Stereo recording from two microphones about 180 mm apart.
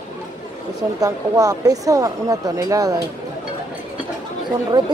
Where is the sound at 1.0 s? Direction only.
20° right (ahead or behind).